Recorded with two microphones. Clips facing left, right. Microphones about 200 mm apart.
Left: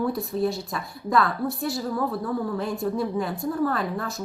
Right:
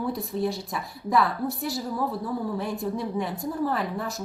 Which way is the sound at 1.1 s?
15° right (ahead or behind).